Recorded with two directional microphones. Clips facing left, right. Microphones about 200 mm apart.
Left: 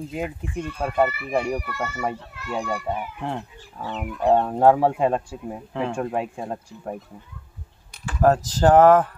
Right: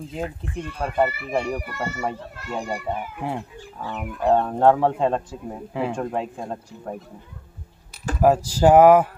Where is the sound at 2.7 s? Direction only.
10° right (ahead or behind); by 5.6 s 5° left (ahead or behind).